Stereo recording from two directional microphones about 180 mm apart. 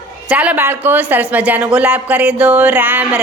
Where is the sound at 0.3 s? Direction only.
10° right (ahead or behind).